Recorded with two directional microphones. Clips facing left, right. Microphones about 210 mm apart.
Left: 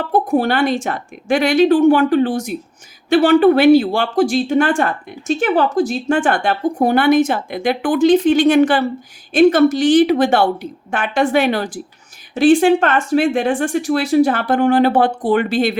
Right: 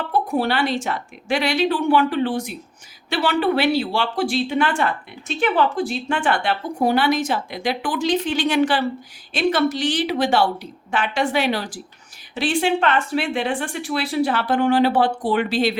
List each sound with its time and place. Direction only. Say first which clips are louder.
0.1 s speech: left 6 dB; 50° left (ahead or behind)